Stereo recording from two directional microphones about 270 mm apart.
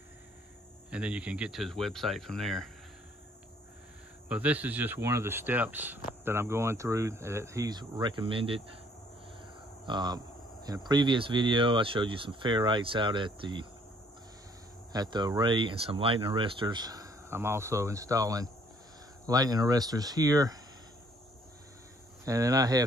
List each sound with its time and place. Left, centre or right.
0.8 s speech: centre
4.3 s speech: centre
9.8 s speech: centre
14.9 s speech: centre
22.2 s speech: centre